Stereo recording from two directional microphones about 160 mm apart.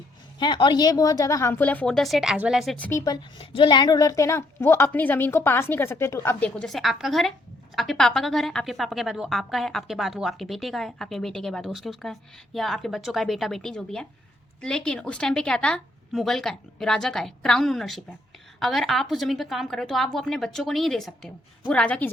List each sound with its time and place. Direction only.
0.3 s a woman's voice: 30° left (ahead or behind); by 2.7 s centre (ahead or behind)
2.7 s a woman's voice: 10° left (ahead or behind)
3.0 s a woman's voice: 25° left (ahead or behind); by 22.1 s 10° left (ahead or behind)